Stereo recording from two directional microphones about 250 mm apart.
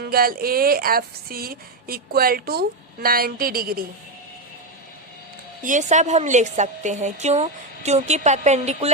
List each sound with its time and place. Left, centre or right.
0.0 s speech: right
5.6 s a woman's voice: right